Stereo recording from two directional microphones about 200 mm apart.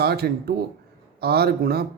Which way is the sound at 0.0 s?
50° right (ahead or behind).